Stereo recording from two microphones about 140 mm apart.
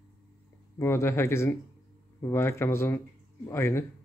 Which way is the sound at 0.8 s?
20° left (ahead or behind).